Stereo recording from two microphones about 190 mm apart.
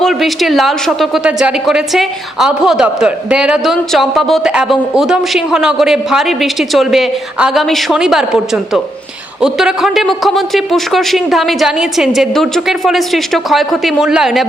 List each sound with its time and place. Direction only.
0.0 s a woman's voice: centre (ahead or behind)